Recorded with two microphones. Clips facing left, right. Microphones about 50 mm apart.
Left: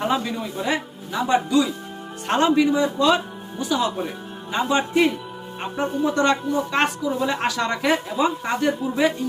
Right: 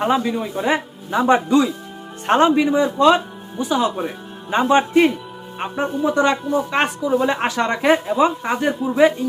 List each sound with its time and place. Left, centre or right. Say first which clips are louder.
0.0 s a woman's voice: right 4 dB; centre
5.9 s a woman's voice: right 2 dB; centre